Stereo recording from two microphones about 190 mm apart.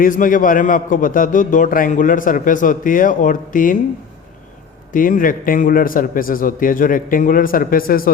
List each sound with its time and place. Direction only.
0.0 s a man's voice: 45° left (ahead or behind)
4.9 s a man's voice: 45° left (ahead or behind)